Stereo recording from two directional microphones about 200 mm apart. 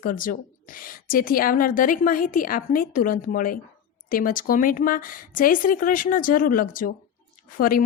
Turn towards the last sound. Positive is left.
turn(degrees=45)  # may be behind; listen again after turning